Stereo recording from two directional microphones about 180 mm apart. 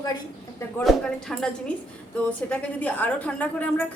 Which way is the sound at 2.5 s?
10° left (ahead or behind).